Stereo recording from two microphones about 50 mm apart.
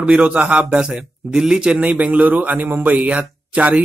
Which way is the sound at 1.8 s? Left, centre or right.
Right.